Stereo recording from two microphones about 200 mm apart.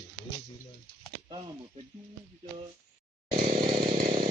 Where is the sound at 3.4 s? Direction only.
50° right (ahead or behind).